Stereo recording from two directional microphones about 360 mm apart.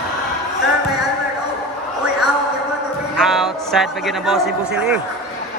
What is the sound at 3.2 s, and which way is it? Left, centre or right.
Speech, centre.